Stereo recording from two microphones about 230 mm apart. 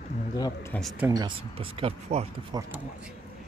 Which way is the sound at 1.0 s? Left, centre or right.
Centre.